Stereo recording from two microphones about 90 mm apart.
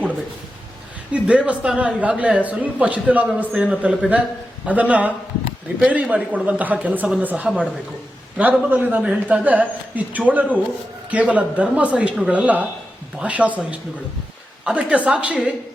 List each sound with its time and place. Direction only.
1.1 s a man's voice: 15° right (ahead or behind)